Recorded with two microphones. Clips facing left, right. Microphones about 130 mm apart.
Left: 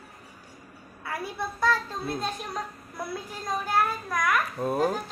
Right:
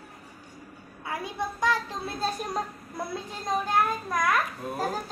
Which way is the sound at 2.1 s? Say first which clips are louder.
Right 6 dB; 35° right (ahead or behind).